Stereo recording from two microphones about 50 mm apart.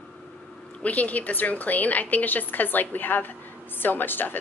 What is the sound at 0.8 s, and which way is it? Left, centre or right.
A woman's voice, left.